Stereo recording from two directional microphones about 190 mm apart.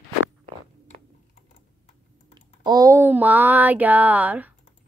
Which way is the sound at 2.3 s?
20° right (ahead or behind).